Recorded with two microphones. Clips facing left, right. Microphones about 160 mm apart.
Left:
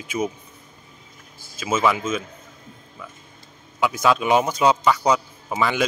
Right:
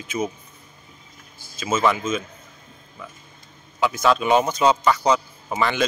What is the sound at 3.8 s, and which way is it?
Speech, 10° left (ahead or behind).